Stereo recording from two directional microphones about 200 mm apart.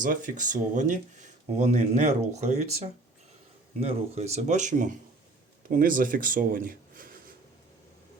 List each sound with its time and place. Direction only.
0.0 s speech: 40° right (ahead or behind)